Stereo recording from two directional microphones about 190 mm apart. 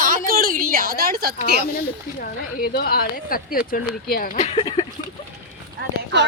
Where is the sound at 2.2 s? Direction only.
50° left (ahead or behind).